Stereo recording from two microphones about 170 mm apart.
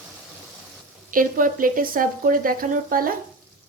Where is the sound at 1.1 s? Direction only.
55° right (ahead or behind).